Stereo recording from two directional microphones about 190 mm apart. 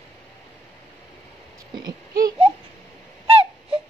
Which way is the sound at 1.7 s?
20° right (ahead or behind).